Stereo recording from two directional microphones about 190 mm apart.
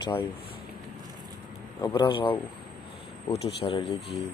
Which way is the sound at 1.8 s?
20° left (ahead or behind).